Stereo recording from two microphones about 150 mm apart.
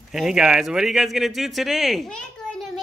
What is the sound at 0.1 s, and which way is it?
Speech, 5° right (ahead or behind).